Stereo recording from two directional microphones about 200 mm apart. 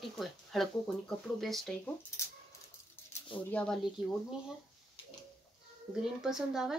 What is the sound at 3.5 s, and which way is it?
Speech, 5° left (ahead or behind).